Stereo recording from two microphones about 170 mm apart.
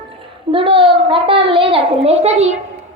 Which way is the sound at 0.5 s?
30° right (ahead or behind).